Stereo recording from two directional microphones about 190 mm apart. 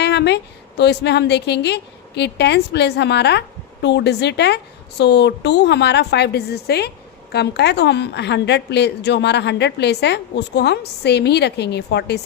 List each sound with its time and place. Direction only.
0.0 s a woman's voice: 65° left (ahead or behind)